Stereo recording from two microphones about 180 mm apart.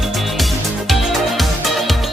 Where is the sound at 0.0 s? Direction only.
Centre (ahead or behind).